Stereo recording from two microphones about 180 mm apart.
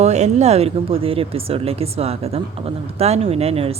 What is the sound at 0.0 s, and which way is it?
A woman's voice, 40° right (ahead or behind).